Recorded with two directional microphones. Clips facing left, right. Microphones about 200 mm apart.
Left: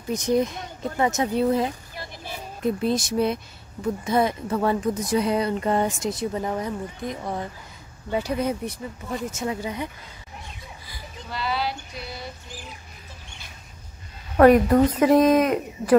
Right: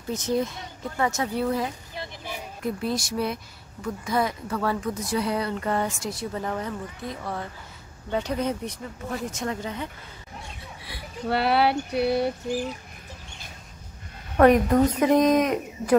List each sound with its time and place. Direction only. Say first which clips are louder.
0.1 s speech: left 4 dB; 15° left (ahead or behind)
2.0 s a sound: right 1 dB; 15° right (ahead or behind)
2.6 s speech: left 5 dB; 20° left (ahead or behind)
10.8 s speech: right 6 dB; 65° right (ahead or behind)
14.3 s speech: left 3 dB; 5° left (ahead or behind)